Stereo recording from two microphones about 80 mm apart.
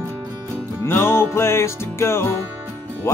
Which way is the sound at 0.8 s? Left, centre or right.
Left.